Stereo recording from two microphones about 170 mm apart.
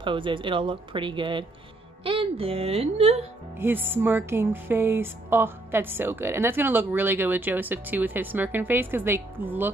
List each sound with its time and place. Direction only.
0.0 s a woman's voice: 30° right (ahead or behind)
3.5 s music: 15° right (ahead or behind)